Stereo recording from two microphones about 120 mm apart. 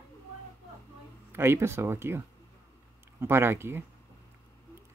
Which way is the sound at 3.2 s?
20° right (ahead or behind).